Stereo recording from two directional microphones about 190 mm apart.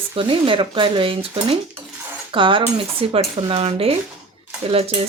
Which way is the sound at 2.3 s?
25° right (ahead or behind).